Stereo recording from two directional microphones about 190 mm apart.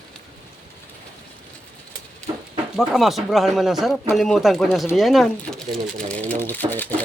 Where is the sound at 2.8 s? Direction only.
Centre (ahead or behind).